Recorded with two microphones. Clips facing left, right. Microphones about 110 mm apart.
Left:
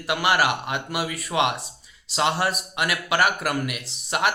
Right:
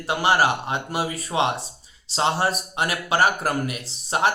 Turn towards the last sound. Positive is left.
turn(degrees=-35)  # may be behind; listen again after turning